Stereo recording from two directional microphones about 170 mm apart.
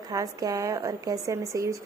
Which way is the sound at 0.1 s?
20° right (ahead or behind).